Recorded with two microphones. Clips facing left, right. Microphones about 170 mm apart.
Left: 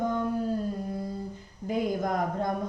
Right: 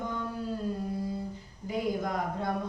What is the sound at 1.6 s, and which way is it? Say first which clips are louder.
Speech: left 3 dB; 45° left (ahead or behind).